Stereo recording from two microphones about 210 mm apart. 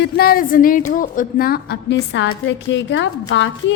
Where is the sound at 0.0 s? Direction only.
45° left (ahead or behind).